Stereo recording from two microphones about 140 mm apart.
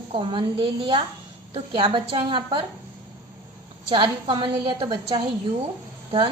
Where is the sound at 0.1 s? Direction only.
35° right (ahead or behind).